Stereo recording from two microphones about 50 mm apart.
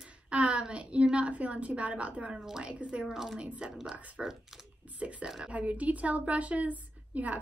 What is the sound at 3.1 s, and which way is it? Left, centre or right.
Speech, centre.